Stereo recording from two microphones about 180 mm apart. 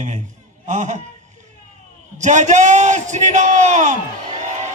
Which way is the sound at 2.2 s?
40° right (ahead or behind).